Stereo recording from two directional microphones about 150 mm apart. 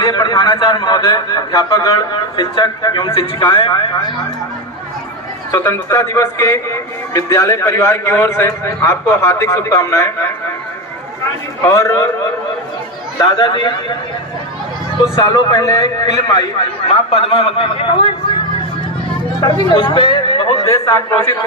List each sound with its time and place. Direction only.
0.0 s a man's voice: 30° left (ahead or behind)
5.5 s a man's voice: 20° left (ahead or behind)
11.7 s a man's voice: 20° left (ahead or behind)
13.1 s a man's voice: 30° left (ahead or behind)
15.1 s a man's voice: 25° left (ahead or behind)
17.1 s speech: 40° left (ahead or behind)
19.4 s a man's voice: 30° left (ahead or behind)